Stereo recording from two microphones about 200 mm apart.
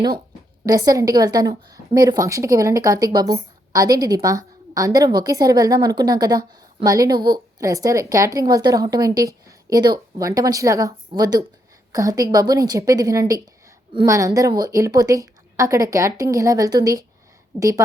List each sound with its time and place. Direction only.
0.6 s a woman's voice: 20° right (ahead or behind)